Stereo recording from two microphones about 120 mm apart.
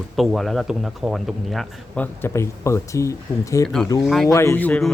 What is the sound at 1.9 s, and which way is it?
Speech, 15° left (ahead or behind).